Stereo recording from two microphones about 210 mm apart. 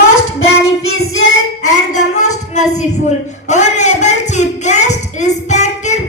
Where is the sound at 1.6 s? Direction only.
35° left (ahead or behind).